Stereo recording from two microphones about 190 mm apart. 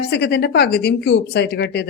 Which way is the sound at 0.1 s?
60° left (ahead or behind).